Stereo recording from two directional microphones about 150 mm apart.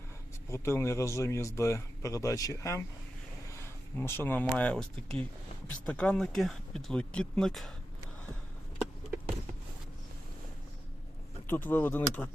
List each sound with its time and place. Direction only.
0.5 s speech: 20° left (ahead or behind); by 7.7 s centre (ahead or behind)
11.4 s speech: 15° left (ahead or behind)